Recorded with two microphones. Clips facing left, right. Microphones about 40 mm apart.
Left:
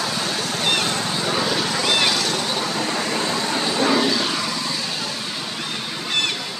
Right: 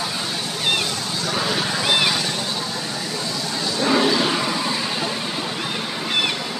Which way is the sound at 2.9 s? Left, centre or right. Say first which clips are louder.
Left 4 dB; left.